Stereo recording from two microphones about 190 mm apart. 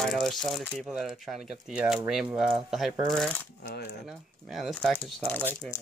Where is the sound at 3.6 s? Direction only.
60° left (ahead or behind).